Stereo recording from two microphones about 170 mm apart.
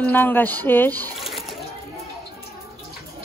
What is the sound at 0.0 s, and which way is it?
Speech, 10° left (ahead or behind).